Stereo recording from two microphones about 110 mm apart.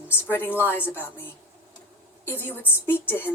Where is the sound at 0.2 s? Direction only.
20° left (ahead or behind).